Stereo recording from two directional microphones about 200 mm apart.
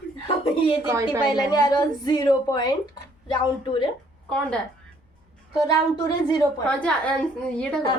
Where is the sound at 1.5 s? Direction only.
20° left (ahead or behind).